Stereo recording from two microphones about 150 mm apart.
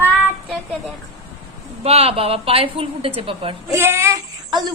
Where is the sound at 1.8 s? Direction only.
40° right (ahead or behind).